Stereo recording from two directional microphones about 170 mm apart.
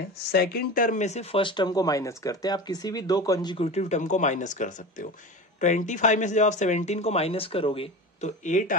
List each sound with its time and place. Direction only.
0.3 s speech: 65° left (ahead or behind); by 3.5 s 20° left (ahead or behind)
3.5 s speech: 40° left (ahead or behind)